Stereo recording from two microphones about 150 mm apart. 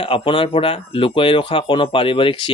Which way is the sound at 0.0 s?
35° left (ahead or behind).